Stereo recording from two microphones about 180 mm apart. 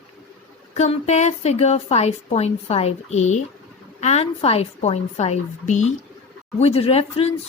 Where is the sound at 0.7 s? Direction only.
40° left (ahead or behind).